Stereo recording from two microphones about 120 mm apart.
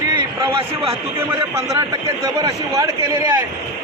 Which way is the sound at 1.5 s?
25° right (ahead or behind).